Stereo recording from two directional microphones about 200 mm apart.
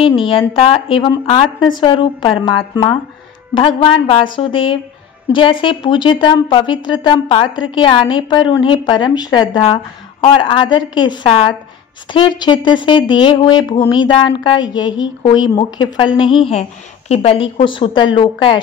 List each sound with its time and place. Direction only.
0.0 s a woman's voice: 25° left (ahead or behind)